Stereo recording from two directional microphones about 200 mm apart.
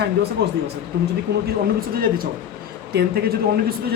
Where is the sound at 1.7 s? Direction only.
45° right (ahead or behind).